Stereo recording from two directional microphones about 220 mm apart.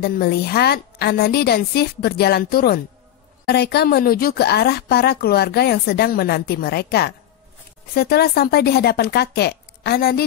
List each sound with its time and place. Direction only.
0.0 s speech: 45° left (ahead or behind)